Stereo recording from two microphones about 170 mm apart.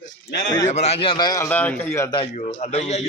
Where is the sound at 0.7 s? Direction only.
40° left (ahead or behind); by 2.0 s 10° left (ahead or behind).